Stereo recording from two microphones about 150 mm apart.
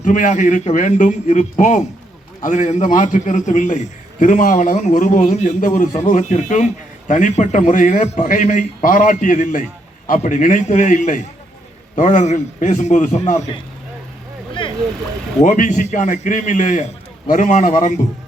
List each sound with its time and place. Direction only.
0.0 s a man's voice: 60° left (ahead or behind)
15.4 s a man's voice: 60° left (ahead or behind)